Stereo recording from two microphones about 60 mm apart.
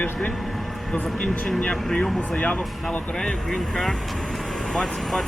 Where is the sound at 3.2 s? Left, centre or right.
Centre.